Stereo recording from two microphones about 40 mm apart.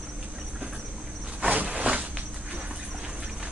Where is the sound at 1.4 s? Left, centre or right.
Right.